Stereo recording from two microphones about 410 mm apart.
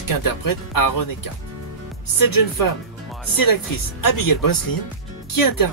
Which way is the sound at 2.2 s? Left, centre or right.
Left.